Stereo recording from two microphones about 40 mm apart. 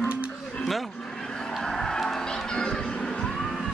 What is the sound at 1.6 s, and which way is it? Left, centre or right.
Crowd, centre.